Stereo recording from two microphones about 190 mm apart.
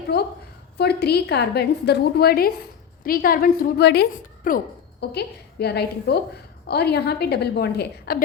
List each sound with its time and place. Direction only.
0.1 s a woman's voice: 55° left (ahead or behind)